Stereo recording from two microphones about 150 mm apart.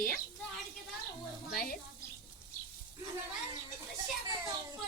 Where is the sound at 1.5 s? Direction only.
70° left (ahead or behind).